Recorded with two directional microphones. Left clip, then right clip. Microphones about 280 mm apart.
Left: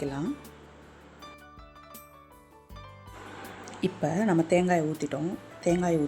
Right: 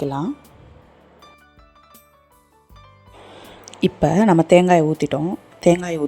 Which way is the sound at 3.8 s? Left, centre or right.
Right.